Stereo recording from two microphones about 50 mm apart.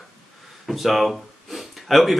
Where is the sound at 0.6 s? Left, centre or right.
Centre.